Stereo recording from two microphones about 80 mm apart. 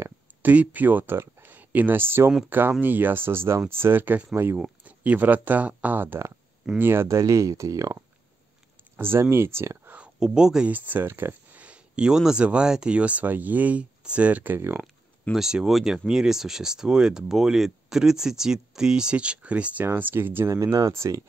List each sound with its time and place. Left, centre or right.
0.4 s speech: centre; by 8.0 s right
8.9 s speech: right
10.2 s speech: centre
10.7 s speech: right
11.6 s speech: centre
15.3 s speech: centre
19.9 s speech: right
20.5 s speech: right